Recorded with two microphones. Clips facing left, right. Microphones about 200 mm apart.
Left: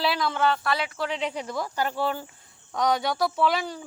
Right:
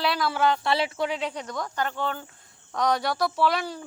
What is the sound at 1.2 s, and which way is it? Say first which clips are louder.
A woman's voice: left 2 dB; 5° left (ahead or behind).